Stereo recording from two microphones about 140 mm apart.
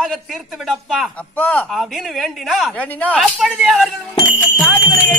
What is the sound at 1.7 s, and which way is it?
A man's voice, centre (ahead or behind).